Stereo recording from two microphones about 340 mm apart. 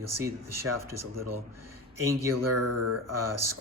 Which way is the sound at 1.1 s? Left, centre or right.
Right.